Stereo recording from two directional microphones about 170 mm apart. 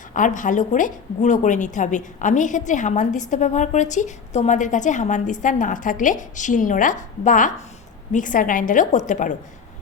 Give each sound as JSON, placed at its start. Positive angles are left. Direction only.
{"t": 0.1, "sound": "a woman's voice", "side_deg": 50}